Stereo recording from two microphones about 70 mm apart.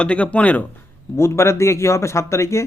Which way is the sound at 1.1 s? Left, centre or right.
Left.